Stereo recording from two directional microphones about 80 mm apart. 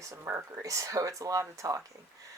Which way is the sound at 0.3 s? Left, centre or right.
Right.